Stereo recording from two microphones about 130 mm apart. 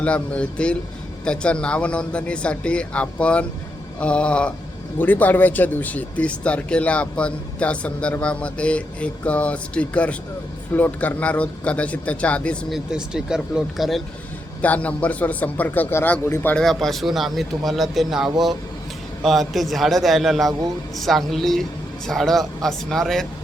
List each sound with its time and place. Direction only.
0.0 s speech: 10° left (ahead or behind)
12.7 s a man's voice: 5° right (ahead or behind)
14.6 s speech: 10° left (ahead or behind)
16.6 s a man's voice: centre (ahead or behind)